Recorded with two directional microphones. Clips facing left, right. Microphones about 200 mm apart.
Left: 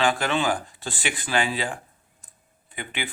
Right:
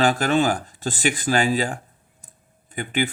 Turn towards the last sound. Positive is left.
turn(degrees=-45)  # may be behind; listen again after turning